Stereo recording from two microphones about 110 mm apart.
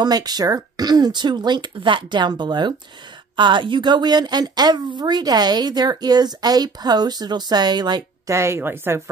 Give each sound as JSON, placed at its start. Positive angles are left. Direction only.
{"t": 0.0, "sound": "a woman's voice", "side_deg": -40}
{"t": 8.3, "sound": "a woman's voice", "side_deg": -25}